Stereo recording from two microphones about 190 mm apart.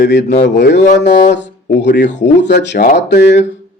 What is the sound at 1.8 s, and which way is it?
Speech, 65° left (ahead or behind).